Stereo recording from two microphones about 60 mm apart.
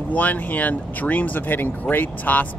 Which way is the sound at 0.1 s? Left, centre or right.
Left.